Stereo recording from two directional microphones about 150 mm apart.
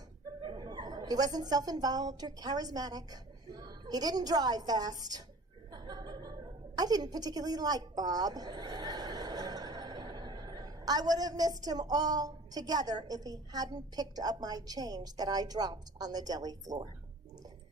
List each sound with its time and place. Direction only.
0.4 s a woman's voice: 30° right (ahead or behind)